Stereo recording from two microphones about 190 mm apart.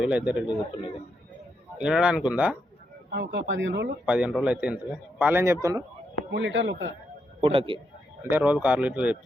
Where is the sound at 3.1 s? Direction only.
70° right (ahead or behind).